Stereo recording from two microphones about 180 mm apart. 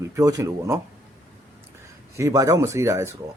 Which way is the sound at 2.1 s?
20° right (ahead or behind).